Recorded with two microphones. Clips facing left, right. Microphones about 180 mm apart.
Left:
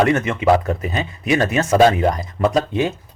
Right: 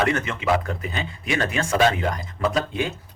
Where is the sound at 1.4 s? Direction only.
20° left (ahead or behind).